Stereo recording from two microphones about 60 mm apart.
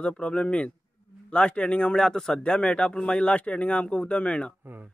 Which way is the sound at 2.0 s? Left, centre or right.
Centre.